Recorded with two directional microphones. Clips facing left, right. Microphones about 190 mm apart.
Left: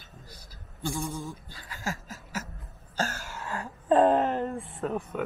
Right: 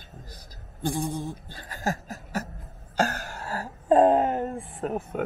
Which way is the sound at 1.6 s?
40° right (ahead or behind).